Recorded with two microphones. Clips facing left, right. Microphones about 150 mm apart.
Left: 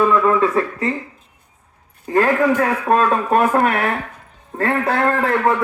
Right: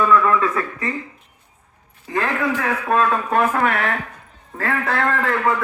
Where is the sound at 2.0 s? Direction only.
40° left (ahead or behind).